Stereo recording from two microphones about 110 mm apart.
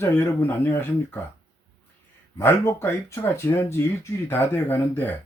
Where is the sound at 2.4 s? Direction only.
20° left (ahead or behind).